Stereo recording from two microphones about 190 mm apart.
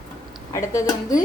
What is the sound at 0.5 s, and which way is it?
Speech, 20° left (ahead or behind).